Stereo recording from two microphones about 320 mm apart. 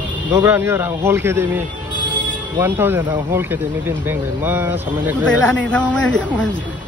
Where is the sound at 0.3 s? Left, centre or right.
Centre.